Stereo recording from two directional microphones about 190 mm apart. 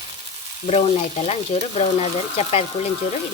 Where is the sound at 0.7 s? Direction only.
30° left (ahead or behind).